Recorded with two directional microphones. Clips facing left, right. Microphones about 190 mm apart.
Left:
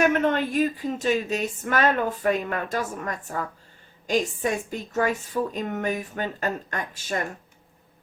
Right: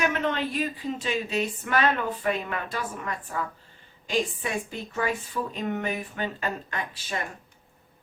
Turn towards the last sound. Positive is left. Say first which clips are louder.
# left 3 dB
turn(degrees=45)  # may be behind; listen again after turning